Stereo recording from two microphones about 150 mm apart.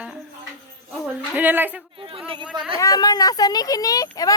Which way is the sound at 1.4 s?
10° right (ahead or behind).